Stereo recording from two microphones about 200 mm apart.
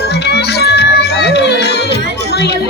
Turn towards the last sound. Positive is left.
turn(degrees=55)  # may be behind; listen again after turning